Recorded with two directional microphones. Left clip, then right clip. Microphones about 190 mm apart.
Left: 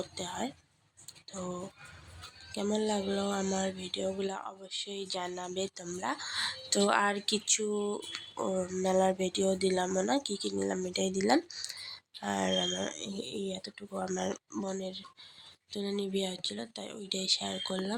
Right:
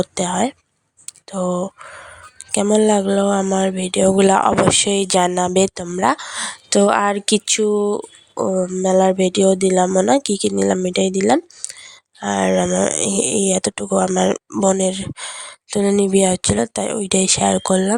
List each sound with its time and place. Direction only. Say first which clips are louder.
0.0 s speech: right 18 dB; 55° right (ahead or behind)
2.5 s a sound: right 17 dB; 55° right (ahead or behind)
12.2 s speech: right 14 dB; 45° right (ahead or behind); by 17.9 s 65° right (ahead or behind)